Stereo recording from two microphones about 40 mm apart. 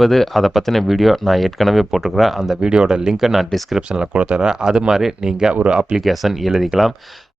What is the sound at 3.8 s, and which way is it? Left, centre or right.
Speech, right.